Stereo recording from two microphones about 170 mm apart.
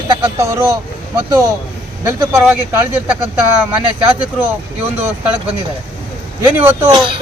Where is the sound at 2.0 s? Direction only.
15° right (ahead or behind).